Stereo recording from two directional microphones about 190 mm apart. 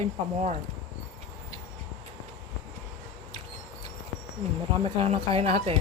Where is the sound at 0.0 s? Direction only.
35° right (ahead or behind).